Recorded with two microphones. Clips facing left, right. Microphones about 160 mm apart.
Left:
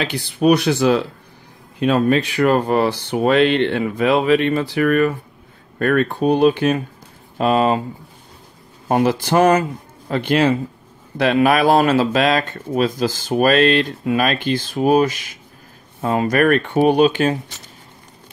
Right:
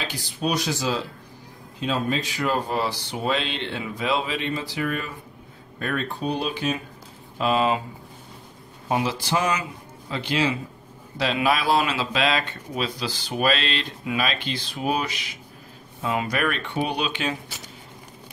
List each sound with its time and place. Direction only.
0.0 s speech: 65° left (ahead or behind); by 7.8 s 45° left (ahead or behind)
8.8 s speech: 50° left (ahead or behind)